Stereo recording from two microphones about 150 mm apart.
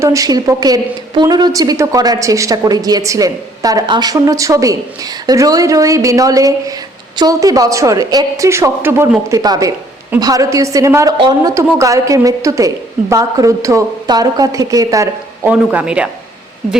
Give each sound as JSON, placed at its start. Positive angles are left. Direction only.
{"t": 0.0, "sound": "a woman's voice", "side_deg": -20}
{"t": 15.4, "sound": "speech", "side_deg": -10}